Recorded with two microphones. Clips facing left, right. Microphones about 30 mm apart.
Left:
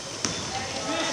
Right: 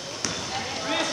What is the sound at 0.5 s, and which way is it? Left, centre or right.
Basketball bounce, centre.